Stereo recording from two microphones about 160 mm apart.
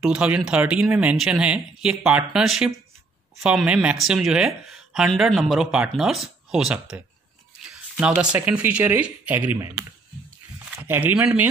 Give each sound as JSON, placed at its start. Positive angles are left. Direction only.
{"t": 0.0, "sound": "speech", "side_deg": -5}
{"t": 8.0, "sound": "speech", "side_deg": -5}